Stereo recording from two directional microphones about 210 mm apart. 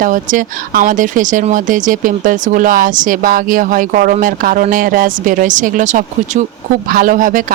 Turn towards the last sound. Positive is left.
turn(degrees=-40)  # may be behind; listen again after turning